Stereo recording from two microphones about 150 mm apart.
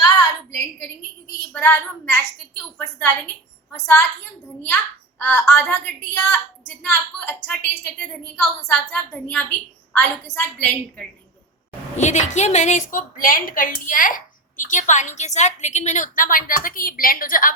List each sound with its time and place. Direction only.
1.5 s a woman's voice: 15° left (ahead or behind)
5.2 s a woman's voice: 15° left (ahead or behind)
11.9 s a woman's voice: 50° left (ahead or behind); by 17.5 s 70° left (ahead or behind)